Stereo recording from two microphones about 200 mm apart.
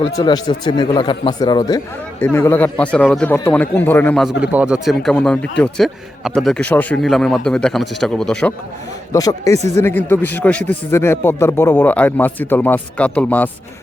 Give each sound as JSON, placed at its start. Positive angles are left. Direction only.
{"t": 0.0, "sound": "a man's voice", "side_deg": 20}
{"t": 9.1, "sound": "a man's voice", "side_deg": 15}